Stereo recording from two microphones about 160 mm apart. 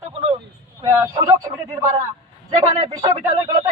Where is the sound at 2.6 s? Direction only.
45° right (ahead or behind).